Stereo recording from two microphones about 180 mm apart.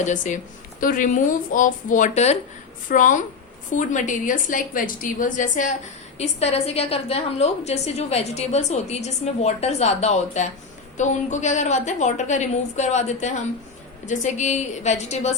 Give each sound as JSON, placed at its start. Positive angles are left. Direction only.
{"t": 0.0, "sound": "a woman's voice", "side_deg": 45}